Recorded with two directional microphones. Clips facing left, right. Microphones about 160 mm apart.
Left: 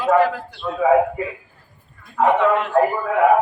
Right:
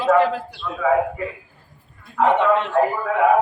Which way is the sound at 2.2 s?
20° left (ahead or behind).